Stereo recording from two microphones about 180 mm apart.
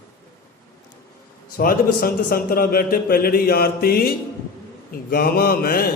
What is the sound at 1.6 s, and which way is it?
A man's voice, 55° left (ahead or behind).